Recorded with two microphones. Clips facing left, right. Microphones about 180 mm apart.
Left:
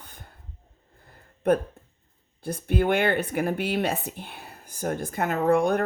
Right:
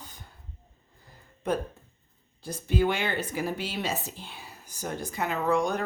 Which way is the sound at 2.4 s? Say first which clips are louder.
Left 2 dB; 60° left (ahead or behind).